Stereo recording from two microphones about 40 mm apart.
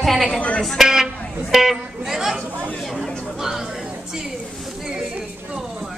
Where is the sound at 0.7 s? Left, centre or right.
Centre.